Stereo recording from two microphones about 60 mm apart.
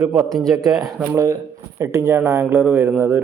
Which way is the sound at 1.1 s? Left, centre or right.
Right.